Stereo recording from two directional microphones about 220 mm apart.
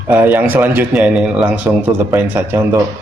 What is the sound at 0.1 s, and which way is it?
A man's voice, 10° right (ahead or behind).